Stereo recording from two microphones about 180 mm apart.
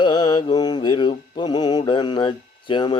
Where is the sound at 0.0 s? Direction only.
25° left (ahead or behind).